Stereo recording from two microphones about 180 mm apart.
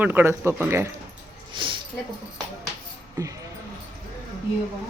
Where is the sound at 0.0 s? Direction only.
10° right (ahead or behind).